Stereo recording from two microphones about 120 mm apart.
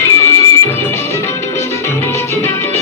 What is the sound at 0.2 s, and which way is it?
Music, 20° left (ahead or behind).